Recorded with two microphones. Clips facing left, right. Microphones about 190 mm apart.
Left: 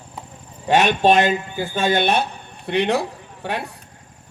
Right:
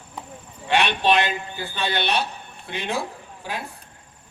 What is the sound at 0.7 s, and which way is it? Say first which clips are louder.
Speech: left 5 dB; 45° left (ahead or behind).